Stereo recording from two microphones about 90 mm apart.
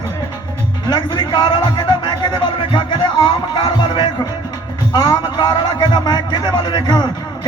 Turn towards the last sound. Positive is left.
turn(degrees=50)  # may be behind; listen again after turning